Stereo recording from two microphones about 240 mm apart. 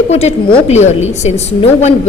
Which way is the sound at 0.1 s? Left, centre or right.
Left.